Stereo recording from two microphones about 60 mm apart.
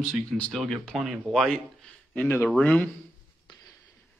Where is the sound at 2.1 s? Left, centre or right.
Left.